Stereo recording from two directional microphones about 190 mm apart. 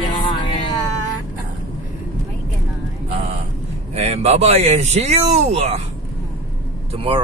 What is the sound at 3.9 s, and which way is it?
Speech, 35° right (ahead or behind).